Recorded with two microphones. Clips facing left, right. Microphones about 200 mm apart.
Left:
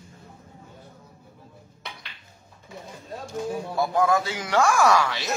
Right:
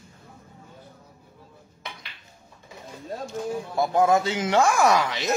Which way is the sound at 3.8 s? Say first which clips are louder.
Right 2 dB; 20° right (ahead or behind).